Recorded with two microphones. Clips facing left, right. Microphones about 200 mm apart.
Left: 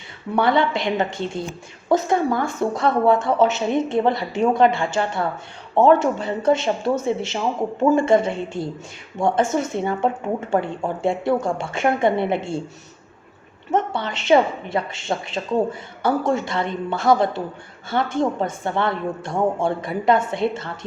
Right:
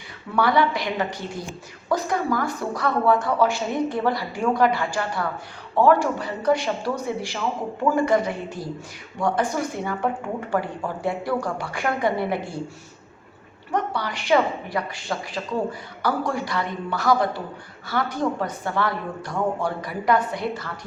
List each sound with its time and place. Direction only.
0.3 s speech: 25° left (ahead or behind)
13.7 s speech: 25° left (ahead or behind)